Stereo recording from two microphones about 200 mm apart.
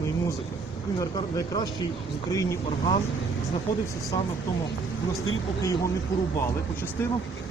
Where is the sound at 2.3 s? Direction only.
15° left (ahead or behind).